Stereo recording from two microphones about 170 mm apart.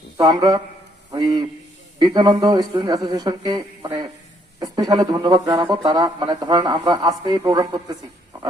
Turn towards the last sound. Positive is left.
turn(degrees=-25)  # may be behind; listen again after turning